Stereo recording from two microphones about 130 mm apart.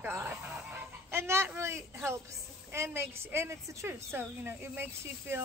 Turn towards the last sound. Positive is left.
turn(degrees=-20)  # may be behind; listen again after turning